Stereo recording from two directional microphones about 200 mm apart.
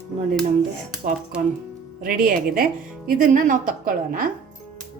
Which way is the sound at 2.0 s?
40° right (ahead or behind).